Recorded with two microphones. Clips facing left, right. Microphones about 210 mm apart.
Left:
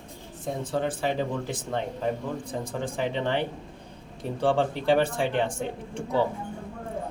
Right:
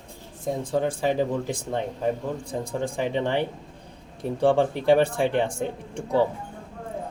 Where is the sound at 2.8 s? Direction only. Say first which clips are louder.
Right 2 dB; 15° right (ahead or behind).